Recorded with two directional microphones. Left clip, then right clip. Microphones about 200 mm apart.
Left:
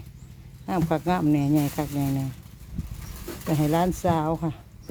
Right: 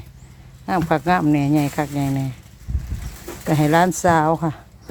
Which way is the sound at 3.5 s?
20° right (ahead or behind).